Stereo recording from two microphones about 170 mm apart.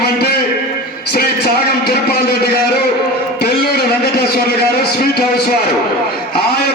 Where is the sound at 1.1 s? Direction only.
70° left (ahead or behind).